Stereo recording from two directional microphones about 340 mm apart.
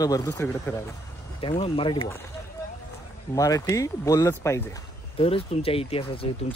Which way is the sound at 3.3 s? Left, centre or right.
Centre.